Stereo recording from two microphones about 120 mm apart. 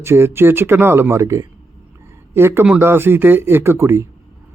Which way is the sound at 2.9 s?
20° right (ahead or behind).